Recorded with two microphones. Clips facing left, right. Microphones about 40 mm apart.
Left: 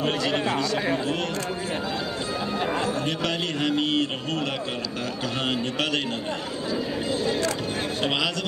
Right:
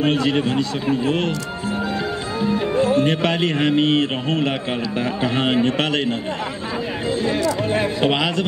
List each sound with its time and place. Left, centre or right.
0.0 s a man's voice: right
2.8 s a man's voice: right
7.1 s a sound: right
8.0 s a man's voice: right